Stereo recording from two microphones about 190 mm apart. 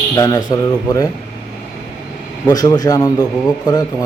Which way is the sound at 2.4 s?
20° left (ahead or behind).